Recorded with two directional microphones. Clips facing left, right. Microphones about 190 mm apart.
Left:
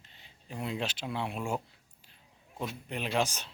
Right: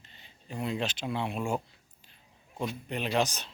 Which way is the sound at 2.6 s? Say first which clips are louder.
Right 3 dB; 5° left (ahead or behind).